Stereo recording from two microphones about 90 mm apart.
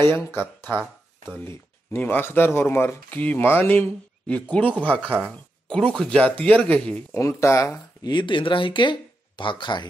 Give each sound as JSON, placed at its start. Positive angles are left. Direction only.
{"t": 0.1, "sound": "speech", "side_deg": 25}
{"t": 7.2, "sound": "speech", "side_deg": 35}
{"t": 8.0, "sound": "speech", "side_deg": 55}